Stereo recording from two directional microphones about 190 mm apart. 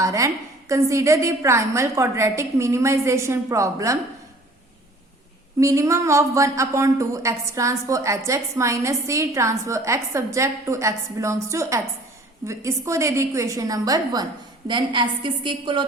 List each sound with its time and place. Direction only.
0.0 s a sound: 15° right (ahead or behind)
0.7 s a woman's voice: 15° right (ahead or behind)
5.5 s a woman's voice: 15° right (ahead or behind)